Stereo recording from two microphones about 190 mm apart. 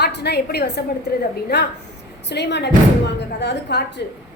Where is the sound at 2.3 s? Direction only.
65° left (ahead or behind).